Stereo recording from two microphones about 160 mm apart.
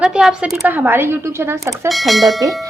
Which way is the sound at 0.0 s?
5° right (ahead or behind).